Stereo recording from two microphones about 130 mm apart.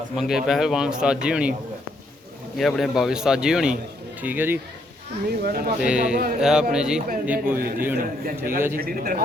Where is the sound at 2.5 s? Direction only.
Centre (ahead or behind); by 4.6 s 15° right (ahead or behind).